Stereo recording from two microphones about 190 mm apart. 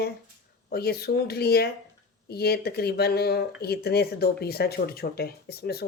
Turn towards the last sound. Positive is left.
turn(degrees=55)  # may be behind; listen again after turning